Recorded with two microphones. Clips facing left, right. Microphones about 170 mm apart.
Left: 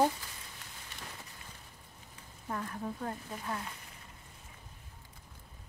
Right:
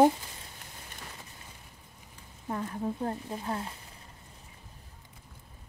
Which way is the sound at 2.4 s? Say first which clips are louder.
Right 5 dB; 25° right (ahead or behind).